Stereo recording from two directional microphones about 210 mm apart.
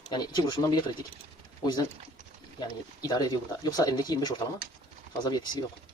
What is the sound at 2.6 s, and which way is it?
Speech, 20° left (ahead or behind).